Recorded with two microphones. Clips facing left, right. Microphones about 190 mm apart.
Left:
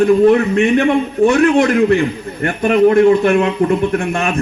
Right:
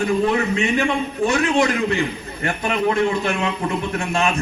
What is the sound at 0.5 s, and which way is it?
A man's voice, 55° left (ahead or behind).